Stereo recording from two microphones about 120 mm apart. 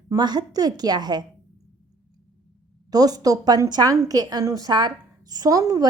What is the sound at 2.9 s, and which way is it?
A woman's voice, 30° right (ahead or behind).